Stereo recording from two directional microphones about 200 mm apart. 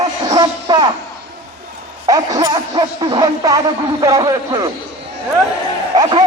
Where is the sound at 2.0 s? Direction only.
20° right (ahead or behind).